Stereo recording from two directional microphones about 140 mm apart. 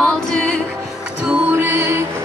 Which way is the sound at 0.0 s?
5° left (ahead or behind).